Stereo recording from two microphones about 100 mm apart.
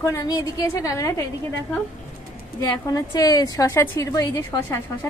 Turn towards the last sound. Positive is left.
turn(degrees=25)  # may be behind; listen again after turning